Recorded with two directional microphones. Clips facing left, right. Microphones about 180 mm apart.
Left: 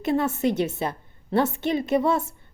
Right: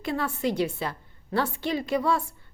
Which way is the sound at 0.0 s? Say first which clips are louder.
Left 5 dB; 20° left (ahead or behind).